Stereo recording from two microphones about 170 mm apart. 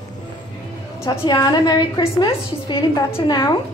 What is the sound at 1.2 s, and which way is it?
A woman's voice, 25° left (ahead or behind).